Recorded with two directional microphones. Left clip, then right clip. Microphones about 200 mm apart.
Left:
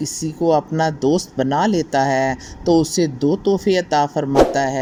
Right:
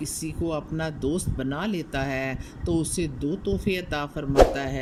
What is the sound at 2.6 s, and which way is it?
Speech, 50° left (ahead or behind).